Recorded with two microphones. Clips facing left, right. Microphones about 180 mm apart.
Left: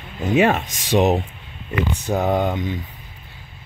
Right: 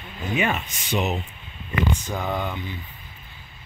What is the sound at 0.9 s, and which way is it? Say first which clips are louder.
Speech: left 8 dB; 90° left.